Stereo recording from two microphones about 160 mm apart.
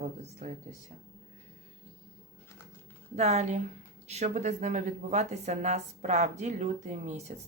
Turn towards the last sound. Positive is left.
turn(degrees=-45)  # may be behind; listen again after turning